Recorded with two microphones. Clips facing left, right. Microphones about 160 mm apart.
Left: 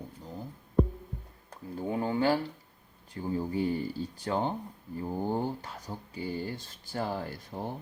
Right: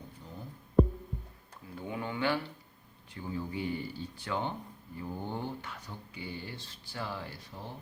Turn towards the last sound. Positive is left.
turn(degrees=45)  # may be behind; listen again after turning